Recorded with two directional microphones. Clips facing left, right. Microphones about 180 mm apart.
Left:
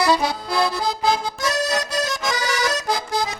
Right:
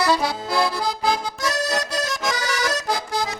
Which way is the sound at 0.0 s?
15° left (ahead or behind).